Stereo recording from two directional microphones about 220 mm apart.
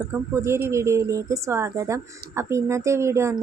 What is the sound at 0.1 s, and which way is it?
A woman's voice, 10° right (ahead or behind).